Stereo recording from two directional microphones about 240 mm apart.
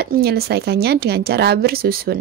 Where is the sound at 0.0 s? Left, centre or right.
Right.